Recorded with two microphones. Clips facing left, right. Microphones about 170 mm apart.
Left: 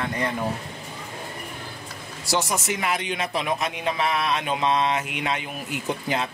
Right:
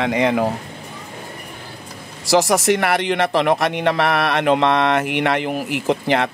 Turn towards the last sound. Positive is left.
turn(degrees=-80)